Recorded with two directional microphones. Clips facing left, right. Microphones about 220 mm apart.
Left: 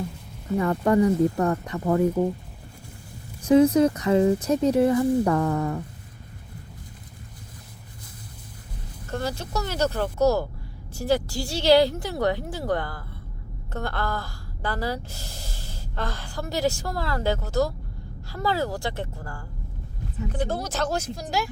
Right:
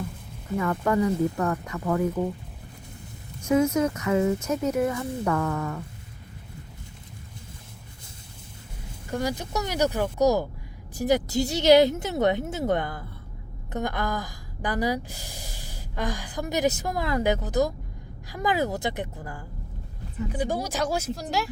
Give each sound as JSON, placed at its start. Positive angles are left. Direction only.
{"t": 0.6, "sound": "speech", "side_deg": 35}
{"t": 3.4, "sound": "speech", "side_deg": 35}
{"t": 9.0, "sound": "a woman's voice", "side_deg": -10}